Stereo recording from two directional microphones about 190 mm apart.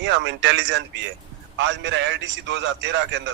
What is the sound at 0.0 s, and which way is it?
A man's voice, 70° right (ahead or behind).